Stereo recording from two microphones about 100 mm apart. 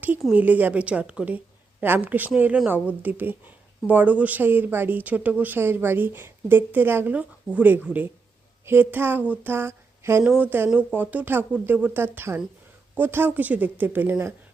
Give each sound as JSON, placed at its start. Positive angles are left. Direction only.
{"t": 0.3, "sound": "a woman's voice", "side_deg": -15}